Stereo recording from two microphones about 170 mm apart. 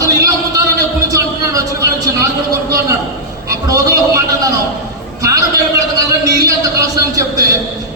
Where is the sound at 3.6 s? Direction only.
20° right (ahead or behind).